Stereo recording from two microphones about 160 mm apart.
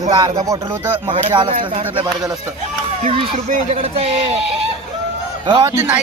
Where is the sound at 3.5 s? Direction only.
55° right (ahead or behind).